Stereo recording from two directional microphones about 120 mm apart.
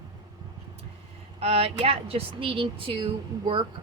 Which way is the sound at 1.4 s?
50° right (ahead or behind).